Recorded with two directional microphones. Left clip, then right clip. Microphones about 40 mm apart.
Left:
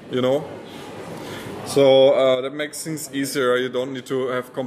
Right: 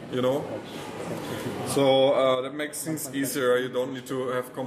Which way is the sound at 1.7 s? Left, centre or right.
Left.